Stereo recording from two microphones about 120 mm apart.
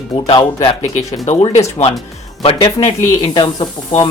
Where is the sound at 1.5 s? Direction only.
65° left (ahead or behind).